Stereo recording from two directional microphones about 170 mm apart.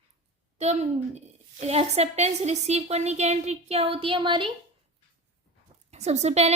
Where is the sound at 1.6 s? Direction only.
40° right (ahead or behind).